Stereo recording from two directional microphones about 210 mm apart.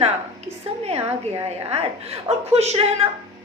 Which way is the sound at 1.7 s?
30° right (ahead or behind).